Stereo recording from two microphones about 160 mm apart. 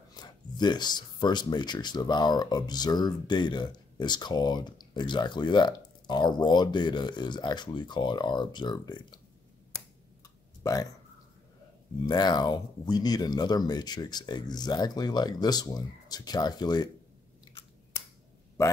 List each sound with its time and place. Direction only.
0.1 s speech: 25° left (ahead or behind)
10.6 s speech: 20° left (ahead or behind)
12.1 s speech: 25° left (ahead or behind)